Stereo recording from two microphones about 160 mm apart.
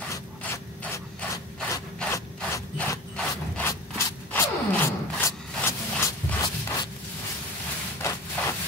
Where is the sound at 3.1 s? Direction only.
15° left (ahead or behind).